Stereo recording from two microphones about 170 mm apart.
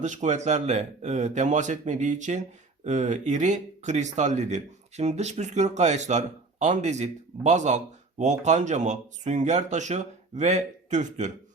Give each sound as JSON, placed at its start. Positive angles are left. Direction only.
{"t": 0.0, "sound": "speech", "side_deg": -45}